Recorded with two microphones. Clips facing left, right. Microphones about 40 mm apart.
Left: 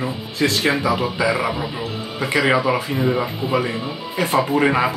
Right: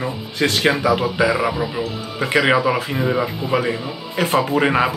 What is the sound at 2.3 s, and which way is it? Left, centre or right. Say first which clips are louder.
Speech: right 1 dB; right.